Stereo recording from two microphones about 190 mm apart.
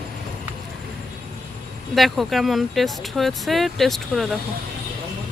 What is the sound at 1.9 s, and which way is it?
Speech, centre (ahead or behind).